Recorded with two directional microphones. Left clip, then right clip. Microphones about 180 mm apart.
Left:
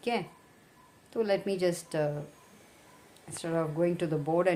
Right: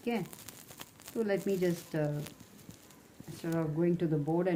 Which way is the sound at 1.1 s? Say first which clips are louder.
Left 3 dB; 40° left (ahead or behind).